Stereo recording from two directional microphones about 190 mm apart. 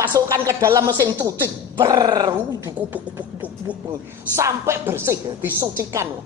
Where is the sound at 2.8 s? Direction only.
10° right (ahead or behind).